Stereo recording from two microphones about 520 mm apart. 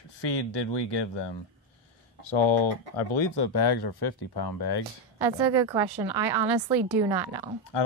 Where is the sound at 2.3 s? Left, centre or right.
Left.